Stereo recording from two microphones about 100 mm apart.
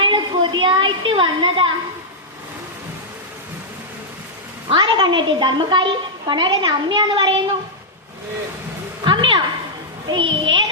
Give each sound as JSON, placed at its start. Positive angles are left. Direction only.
{"t": 0.0, "sound": "a sound", "side_deg": -55}
{"t": 4.7, "sound": "a woman's voice", "side_deg": -55}
{"t": 9.0, "sound": "a child's voice", "side_deg": -55}